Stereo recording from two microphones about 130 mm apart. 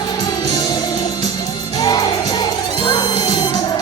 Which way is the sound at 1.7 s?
30° left (ahead or behind).